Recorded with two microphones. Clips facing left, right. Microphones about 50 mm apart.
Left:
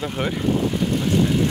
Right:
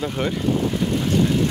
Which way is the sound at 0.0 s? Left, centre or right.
Centre.